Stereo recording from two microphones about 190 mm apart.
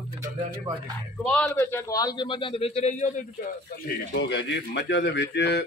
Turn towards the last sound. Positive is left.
turn(degrees=65)  # may be behind; listen again after turning